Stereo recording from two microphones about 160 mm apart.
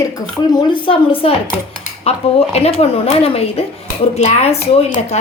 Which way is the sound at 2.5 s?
40° left (ahead or behind).